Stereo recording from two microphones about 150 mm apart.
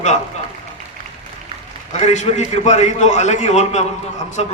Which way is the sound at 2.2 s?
50° left (ahead or behind).